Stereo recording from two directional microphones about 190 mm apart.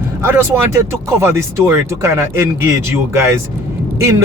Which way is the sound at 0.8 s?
15° right (ahead or behind).